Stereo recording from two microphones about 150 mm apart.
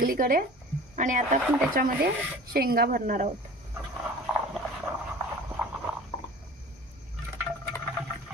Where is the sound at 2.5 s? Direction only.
90° right; by 3.3 s 65° right (ahead or behind).